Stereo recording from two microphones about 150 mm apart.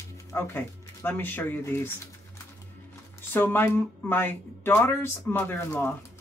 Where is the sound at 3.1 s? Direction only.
15° left (ahead or behind).